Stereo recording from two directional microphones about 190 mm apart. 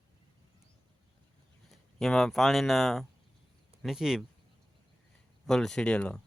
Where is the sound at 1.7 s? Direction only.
Centre (ahead or behind).